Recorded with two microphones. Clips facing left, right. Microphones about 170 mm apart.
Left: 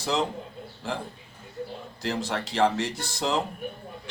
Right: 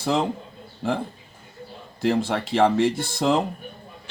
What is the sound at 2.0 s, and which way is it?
Speech, 55° right (ahead or behind).